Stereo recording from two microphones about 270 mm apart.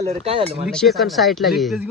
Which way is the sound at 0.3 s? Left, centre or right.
Right.